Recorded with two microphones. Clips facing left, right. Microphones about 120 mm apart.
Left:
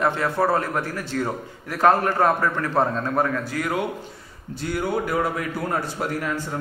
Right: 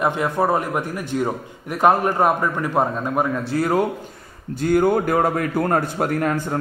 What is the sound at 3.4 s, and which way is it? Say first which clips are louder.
Speech: right 6 dB; 35° right (ahead or behind).